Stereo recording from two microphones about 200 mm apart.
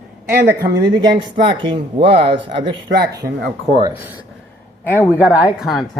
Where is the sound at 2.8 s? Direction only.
50° right (ahead or behind).